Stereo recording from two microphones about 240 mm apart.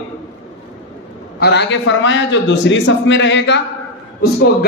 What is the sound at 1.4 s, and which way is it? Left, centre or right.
A man's voice, left.